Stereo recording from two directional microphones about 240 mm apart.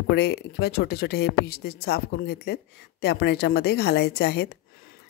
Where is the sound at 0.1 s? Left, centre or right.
Left.